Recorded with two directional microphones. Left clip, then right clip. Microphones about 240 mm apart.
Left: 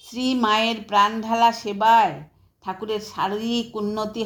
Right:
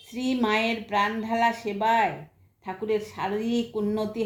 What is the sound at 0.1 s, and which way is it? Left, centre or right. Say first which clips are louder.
A woman's voice: left 5 dB; left.